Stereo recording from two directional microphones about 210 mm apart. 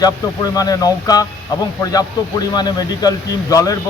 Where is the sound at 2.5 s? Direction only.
20° left (ahead or behind).